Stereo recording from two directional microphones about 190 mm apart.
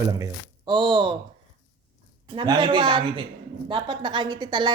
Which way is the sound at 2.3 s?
25° right (ahead or behind).